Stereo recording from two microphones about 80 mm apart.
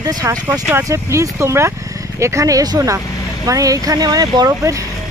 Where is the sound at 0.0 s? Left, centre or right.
Right.